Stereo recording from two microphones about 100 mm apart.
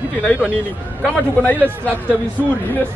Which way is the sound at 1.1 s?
15° left (ahead or behind).